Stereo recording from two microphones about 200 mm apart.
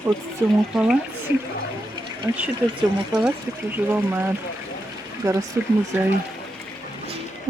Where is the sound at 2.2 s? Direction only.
15° right (ahead or behind).